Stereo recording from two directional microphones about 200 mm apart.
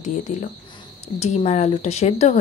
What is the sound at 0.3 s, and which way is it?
Speech, 40° left (ahead or behind).